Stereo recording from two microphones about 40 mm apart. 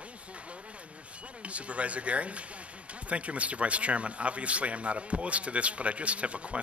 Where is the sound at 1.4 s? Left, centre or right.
Right.